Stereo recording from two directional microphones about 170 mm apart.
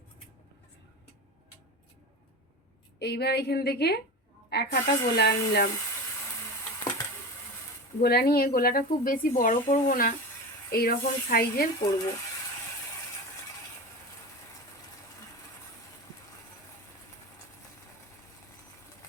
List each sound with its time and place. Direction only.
3.0 s speech: 75° left (ahead or behind)
8.0 s speech: 65° left (ahead or behind)
11.8 s speech: 15° left (ahead or behind)